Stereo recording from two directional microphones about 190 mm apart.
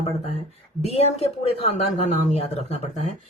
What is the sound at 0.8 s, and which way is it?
Speech, 35° left (ahead or behind).